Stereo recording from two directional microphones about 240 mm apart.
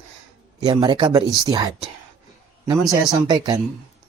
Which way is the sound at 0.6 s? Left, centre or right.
Right.